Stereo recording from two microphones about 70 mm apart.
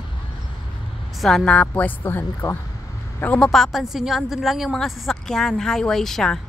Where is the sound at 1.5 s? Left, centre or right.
Left.